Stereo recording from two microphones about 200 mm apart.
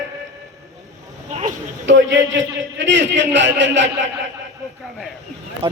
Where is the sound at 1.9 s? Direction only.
65° right (ahead or behind).